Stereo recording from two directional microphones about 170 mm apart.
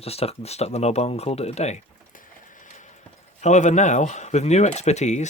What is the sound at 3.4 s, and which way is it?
Speech, 45° left (ahead or behind).